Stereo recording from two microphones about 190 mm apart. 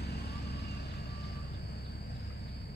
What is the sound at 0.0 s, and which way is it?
Vehicle, 60° left (ahead or behind).